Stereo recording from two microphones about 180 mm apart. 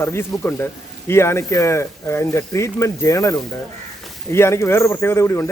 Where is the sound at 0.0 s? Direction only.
15° left (ahead or behind).